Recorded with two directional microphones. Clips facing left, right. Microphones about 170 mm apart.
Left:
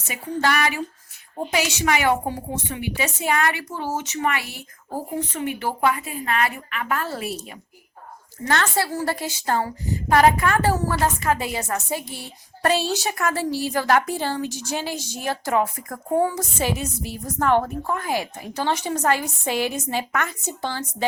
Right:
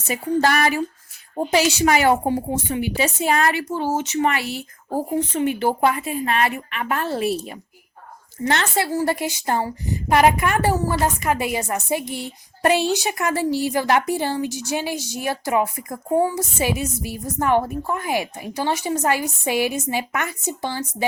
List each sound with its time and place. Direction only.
0.1 s a woman's voice: 40° right (ahead or behind); by 20.8 s 10° right (ahead or behind)